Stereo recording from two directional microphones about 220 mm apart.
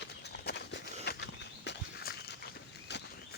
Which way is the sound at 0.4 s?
50° left (ahead or behind).